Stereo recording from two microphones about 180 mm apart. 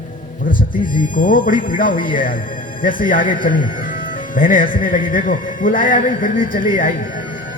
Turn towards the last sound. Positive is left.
turn(degrees=50)  # may be behind; listen again after turning